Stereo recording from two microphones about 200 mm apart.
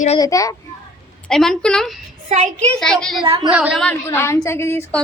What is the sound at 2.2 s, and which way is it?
Speech, 35° right (ahead or behind).